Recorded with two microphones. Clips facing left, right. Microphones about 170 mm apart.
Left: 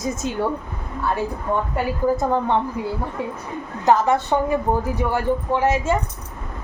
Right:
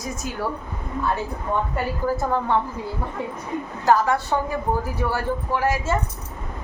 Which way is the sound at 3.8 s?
20° left (ahead or behind).